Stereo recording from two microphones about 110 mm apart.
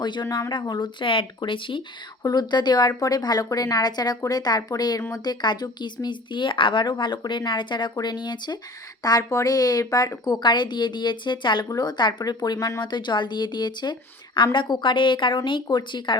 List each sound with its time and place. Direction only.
0.0 s speech: 40° left (ahead or behind)
12.8 s speech: 45° left (ahead or behind)